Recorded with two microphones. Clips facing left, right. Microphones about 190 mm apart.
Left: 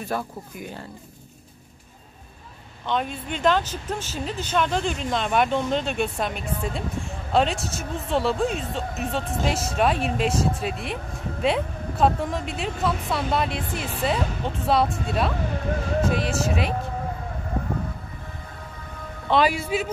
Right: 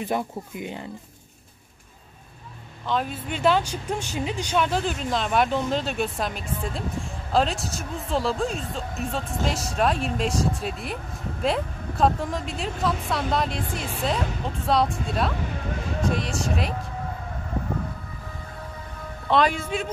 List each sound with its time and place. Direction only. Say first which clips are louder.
0.0 s speech: right 2 dB; 20° right (ahead or behind)
2.9 s speech: even; 5° right (ahead or behind)
19.2 s speech: left 1 dB; 5° left (ahead or behind)